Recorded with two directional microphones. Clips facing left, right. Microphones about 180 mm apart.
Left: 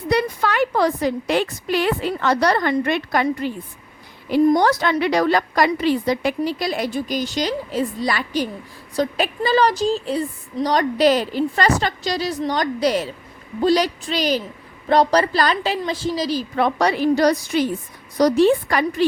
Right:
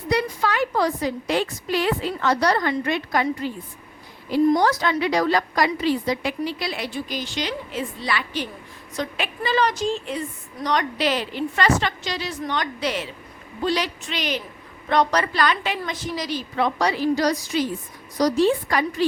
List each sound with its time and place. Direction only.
0.1 s a woman's voice: 60° left (ahead or behind); by 16.5 s 35° left (ahead or behind)
16.6 s a woman's voice: 55° left (ahead or behind)